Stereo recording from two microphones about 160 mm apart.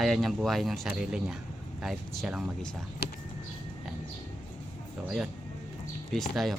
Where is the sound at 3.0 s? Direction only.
90° left.